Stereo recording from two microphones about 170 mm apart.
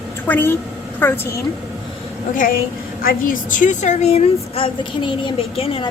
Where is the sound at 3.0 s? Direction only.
55° left (ahead or behind); by 5.9 s 35° left (ahead or behind).